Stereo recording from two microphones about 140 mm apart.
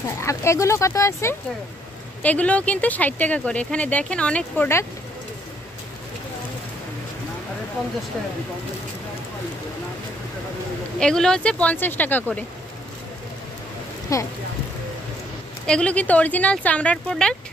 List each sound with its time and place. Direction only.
0.2 s speech: 20° left (ahead or behind)
2.2 s speech: 10° left (ahead or behind)
11.0 s speech: 5° left (ahead or behind)
14.1 s speech: 25° left (ahead or behind)
15.6 s speech: 5° left (ahead or behind)